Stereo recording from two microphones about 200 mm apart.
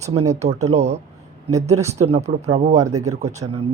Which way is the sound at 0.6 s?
35° right (ahead or behind).